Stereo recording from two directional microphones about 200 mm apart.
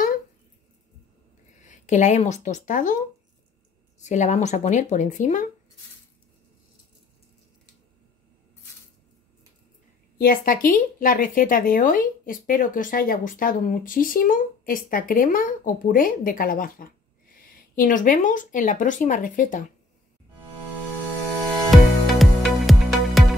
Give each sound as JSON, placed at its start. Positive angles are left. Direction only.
{"t": 1.6, "sound": "speech", "side_deg": 35}
{"t": 4.0, "sound": "speech", "side_deg": 35}
{"t": 10.1, "sound": "speech", "side_deg": 45}
{"t": 21.6, "sound": "music", "side_deg": 0}